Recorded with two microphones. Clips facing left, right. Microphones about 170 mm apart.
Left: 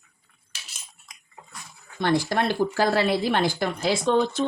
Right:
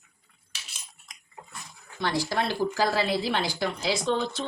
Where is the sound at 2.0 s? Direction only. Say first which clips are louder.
Left 5 dB; 55° left (ahead or behind).